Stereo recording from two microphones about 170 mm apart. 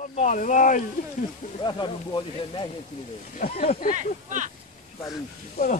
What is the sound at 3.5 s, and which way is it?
Speech, 40° left (ahead or behind).